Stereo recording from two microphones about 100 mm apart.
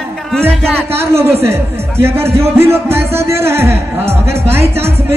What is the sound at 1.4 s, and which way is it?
Speech, 25° right (ahead or behind).